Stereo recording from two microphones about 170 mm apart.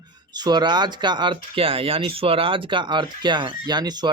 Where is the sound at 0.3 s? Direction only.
25° right (ahead or behind).